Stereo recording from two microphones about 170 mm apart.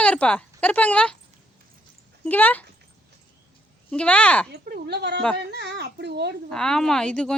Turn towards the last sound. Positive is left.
turn(degrees=5)  # may be behind; listen again after turning